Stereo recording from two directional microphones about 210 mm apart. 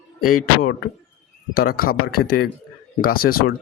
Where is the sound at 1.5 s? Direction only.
45° left (ahead or behind).